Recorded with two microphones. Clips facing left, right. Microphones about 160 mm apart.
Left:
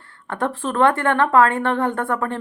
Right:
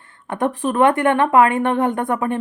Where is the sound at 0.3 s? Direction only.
15° right (ahead or behind).